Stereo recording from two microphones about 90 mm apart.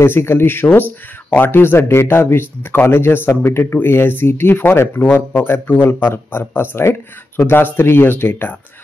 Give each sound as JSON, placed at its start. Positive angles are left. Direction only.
{"t": 0.0, "sound": "speech", "side_deg": 25}